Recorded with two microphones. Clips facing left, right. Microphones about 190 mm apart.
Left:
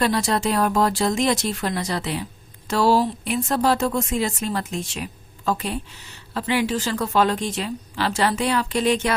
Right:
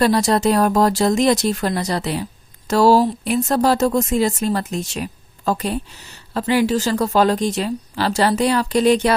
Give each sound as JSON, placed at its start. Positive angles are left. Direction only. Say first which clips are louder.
{"t": 0.0, "sound": "speech", "louder": "right 5 dB", "side_deg": -40}